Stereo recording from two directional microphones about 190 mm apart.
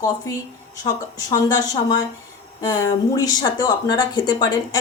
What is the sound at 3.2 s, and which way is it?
Speech, 20° left (ahead or behind).